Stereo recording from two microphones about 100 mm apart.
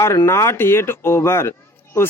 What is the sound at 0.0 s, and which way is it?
Speech, 25° left (ahead or behind).